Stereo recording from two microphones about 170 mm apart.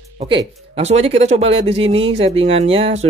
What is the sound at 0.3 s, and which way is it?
Speech, 35° right (ahead or behind).